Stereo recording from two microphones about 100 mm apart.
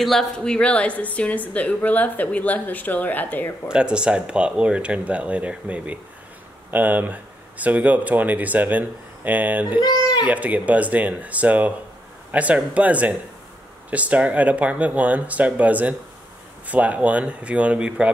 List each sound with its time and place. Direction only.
0.0 s a woman's voice: 5° left (ahead or behind)
3.6 s speech: 10° right (ahead or behind)
9.8 s speech: 45° left (ahead or behind)
10.2 s speech: 15° right (ahead or behind)